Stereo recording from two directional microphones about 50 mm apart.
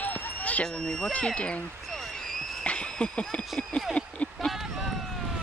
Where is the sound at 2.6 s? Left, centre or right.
Left.